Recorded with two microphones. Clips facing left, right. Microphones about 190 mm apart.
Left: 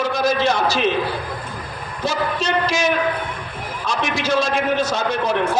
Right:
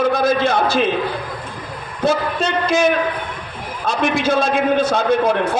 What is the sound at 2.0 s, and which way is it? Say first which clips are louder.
A man's voice: right 4 dB; 55° right (ahead or behind).